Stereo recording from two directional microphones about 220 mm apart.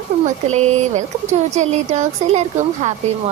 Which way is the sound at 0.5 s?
30° right (ahead or behind).